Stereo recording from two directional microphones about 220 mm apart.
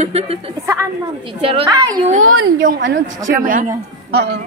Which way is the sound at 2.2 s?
70° right (ahead or behind).